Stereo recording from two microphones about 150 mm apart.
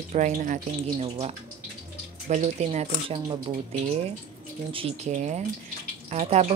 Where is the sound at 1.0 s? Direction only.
45° right (ahead or behind).